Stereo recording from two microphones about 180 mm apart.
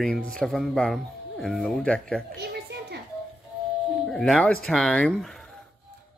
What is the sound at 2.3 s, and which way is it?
Children playing, 65° right (ahead or behind).